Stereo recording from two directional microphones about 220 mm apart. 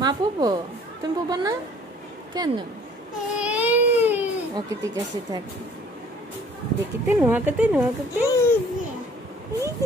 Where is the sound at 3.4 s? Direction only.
5° right (ahead or behind).